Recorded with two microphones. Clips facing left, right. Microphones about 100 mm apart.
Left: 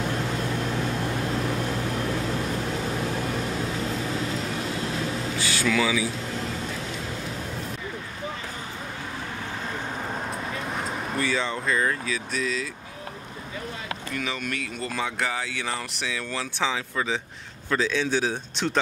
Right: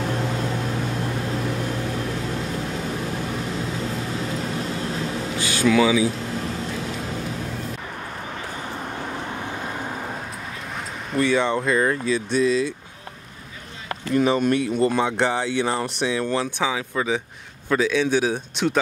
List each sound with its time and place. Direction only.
5.4 s speech: 15° right (ahead or behind)
11.3 s speech: 20° right (ahead or behind)
14.1 s a man's voice: 35° right (ahead or behind); by 18.8 s 15° right (ahead or behind)